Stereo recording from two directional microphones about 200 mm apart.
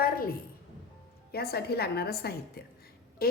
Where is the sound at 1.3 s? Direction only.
50° left (ahead or behind).